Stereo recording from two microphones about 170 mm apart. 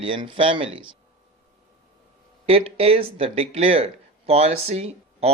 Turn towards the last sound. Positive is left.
turn(degrees=-35)  # may be behind; listen again after turning